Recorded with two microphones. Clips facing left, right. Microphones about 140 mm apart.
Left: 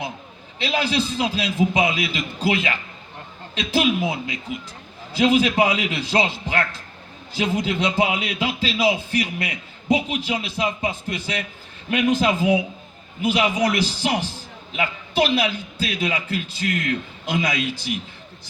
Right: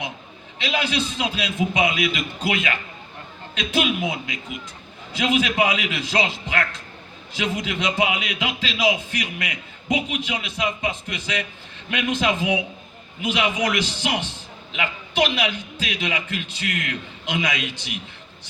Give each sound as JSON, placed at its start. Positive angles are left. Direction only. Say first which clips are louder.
{"t": 0.6, "sound": "a man's voice", "louder": "left 2 dB", "side_deg": 35}